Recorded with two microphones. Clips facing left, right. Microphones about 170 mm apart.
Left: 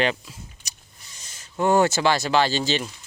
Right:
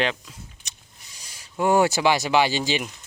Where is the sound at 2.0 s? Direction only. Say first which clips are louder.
Even; 15° right (ahead or behind).